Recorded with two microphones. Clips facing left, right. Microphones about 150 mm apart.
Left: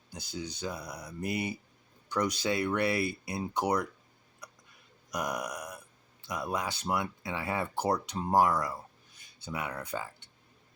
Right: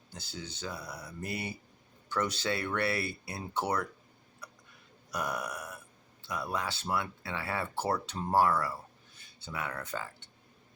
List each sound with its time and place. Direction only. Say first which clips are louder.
0.1 s speech: left 4 dB; 15° left (ahead or behind)
4.4 s a sound: even; 15° left (ahead or behind)
5.1 s speech: left 1 dB; 15° left (ahead or behind)